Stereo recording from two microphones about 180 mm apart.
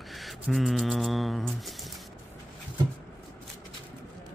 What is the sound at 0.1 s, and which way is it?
Mantra, centre (ahead or behind).